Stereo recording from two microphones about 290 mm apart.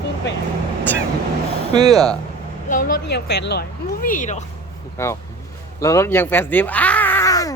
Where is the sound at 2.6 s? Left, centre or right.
Left.